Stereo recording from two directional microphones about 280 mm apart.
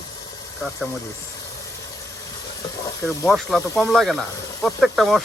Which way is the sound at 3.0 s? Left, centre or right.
Centre.